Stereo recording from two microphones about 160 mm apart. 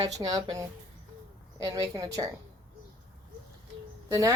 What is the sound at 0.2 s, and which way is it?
A woman's voice, 25° right (ahead or behind).